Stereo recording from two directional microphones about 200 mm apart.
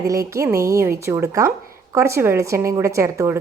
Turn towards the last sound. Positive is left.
turn(degrees=-15)  # may be behind; listen again after turning